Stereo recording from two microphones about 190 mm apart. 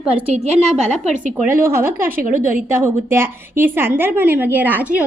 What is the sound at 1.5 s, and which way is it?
Speech, 10° right (ahead or behind).